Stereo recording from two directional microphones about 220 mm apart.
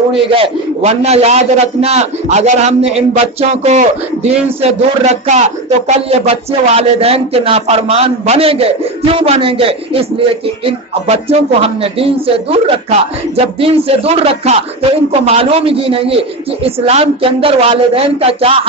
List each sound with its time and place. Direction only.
0.3 s a man's voice: 25° right (ahead or behind)